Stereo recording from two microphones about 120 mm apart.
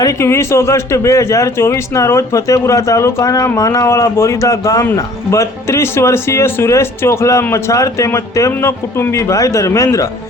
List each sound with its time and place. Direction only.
0.0 s speech: 25° left (ahead or behind)